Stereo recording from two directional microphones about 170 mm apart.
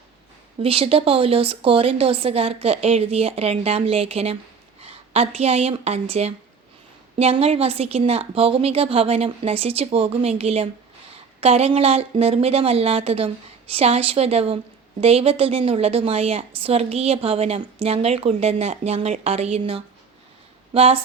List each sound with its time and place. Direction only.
0.6 s a woman's voice: 35° right (ahead or behind)